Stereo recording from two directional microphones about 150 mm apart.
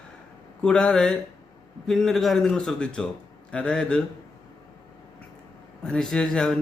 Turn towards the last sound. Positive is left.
turn(degrees=5)  # may be behind; listen again after turning